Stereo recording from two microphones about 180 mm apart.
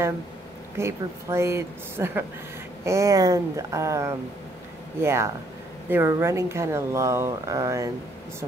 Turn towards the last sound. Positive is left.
turn(degrees=-20)  # may be behind; listen again after turning